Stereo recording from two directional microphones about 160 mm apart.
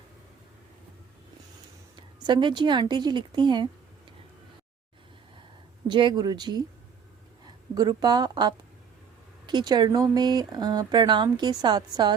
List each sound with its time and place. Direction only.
2.0 s speech: 30° right (ahead or behind)
5.9 s a woman's voice: 30° right (ahead or behind)